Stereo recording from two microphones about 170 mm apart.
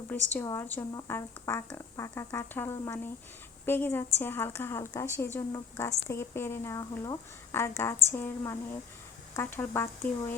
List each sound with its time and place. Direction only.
0.1 s speech: 10° left (ahead or behind)